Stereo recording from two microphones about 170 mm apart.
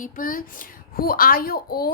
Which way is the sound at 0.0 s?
55° left (ahead or behind).